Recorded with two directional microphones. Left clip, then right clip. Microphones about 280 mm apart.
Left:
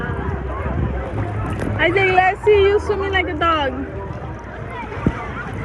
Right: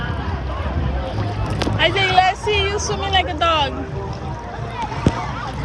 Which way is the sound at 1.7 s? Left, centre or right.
Centre.